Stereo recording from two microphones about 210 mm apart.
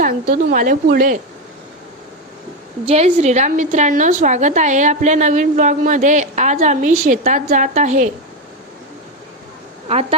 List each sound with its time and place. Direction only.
0.0 s a woman's voice: 45° right (ahead or behind)
2.9 s a woman's voice: 30° right (ahead or behind)
9.9 s a woman's voice: 30° right (ahead or behind)